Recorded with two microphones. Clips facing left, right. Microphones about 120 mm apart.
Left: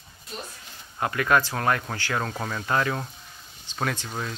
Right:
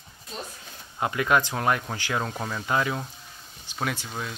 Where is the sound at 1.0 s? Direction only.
20° right (ahead or behind); by 4.3 s centre (ahead or behind).